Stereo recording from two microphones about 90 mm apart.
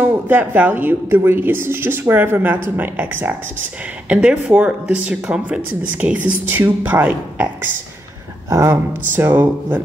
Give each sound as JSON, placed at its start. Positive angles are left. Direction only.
{"t": 0.0, "sound": "a woman's voice", "side_deg": -20}
{"t": 8.5, "sound": "speech", "side_deg": -40}
{"t": 9.1, "sound": "a woman's voice", "side_deg": -20}